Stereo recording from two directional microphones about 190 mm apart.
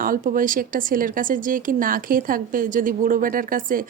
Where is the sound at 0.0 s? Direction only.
45° right (ahead or behind).